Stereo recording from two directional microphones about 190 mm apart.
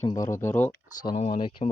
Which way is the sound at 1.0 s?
35° left (ahead or behind).